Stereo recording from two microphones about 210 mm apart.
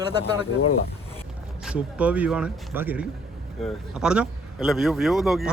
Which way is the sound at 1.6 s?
5° right (ahead or behind).